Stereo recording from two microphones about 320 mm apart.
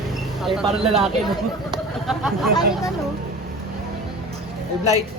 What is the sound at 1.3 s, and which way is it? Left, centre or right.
Speech, centre.